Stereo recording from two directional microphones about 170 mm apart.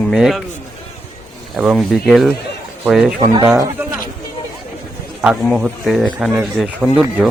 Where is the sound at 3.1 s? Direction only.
20° right (ahead or behind).